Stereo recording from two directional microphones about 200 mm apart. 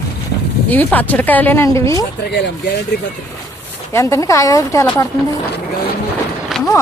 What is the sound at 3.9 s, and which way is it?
A woman's voice, 15° left (ahead or behind).